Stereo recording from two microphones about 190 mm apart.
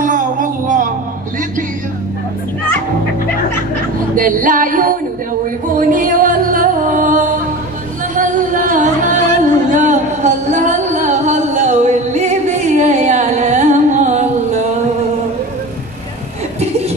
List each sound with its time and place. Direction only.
0.0 s music: 45° right (ahead or behind)
4.1 s music: 45° right (ahead or behind)